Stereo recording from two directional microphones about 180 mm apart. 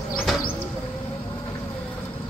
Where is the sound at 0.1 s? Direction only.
Centre (ahead or behind).